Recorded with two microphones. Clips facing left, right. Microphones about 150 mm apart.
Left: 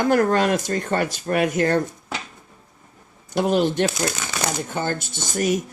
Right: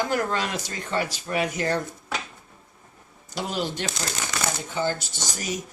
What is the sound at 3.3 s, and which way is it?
Speech, 55° left (ahead or behind).